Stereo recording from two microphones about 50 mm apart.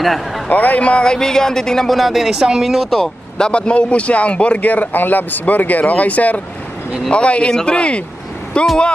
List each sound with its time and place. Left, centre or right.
0.5 s speech: left; by 2.7 s centre
2.7 s speech: centre
3.3 s speech: centre